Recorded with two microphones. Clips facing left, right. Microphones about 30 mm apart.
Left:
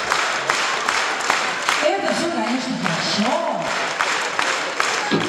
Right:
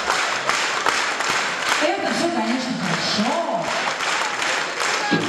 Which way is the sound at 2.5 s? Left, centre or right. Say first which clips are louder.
Left 1 dB; centre.